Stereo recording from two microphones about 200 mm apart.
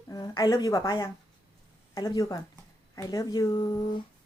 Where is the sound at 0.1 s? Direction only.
20° left (ahead or behind).